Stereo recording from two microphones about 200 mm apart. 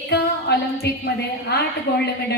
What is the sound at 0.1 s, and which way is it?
A woman's voice, 55° left (ahead or behind).